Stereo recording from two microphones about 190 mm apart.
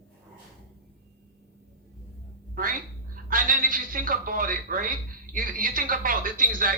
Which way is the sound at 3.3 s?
45° right (ahead or behind).